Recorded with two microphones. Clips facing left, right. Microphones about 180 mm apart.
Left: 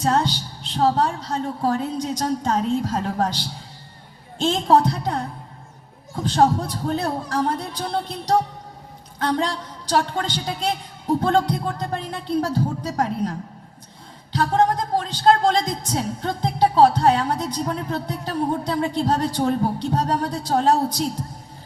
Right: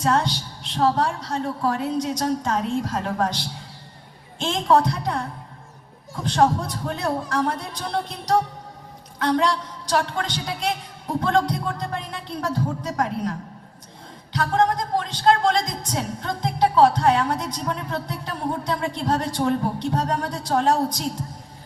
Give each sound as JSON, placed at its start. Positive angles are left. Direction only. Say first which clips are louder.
{"t": 0.0, "sound": "a woman's voice", "louder": "left 1 dB", "side_deg": 30}
{"t": 4.4, "sound": "a woman's voice", "louder": "left 2 dB", "side_deg": 30}
{"t": 6.2, "sound": "a woman's voice", "louder": "left 1 dB", "side_deg": 30}
{"t": 9.1, "sound": "a woman's voice", "louder": "right 2 dB", "side_deg": 30}
{"t": 14.3, "sound": "a woman's voice", "louder": "left 2 dB", "side_deg": 30}